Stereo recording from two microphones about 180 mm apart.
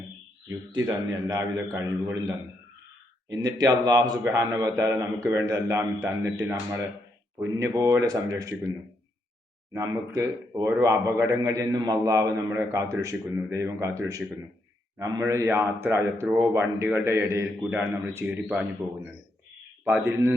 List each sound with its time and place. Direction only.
0.9 s a man's voice: 20° right (ahead or behind)
9.7 s a man's voice: 15° right (ahead or behind)
19.8 s a man's voice: 10° right (ahead or behind)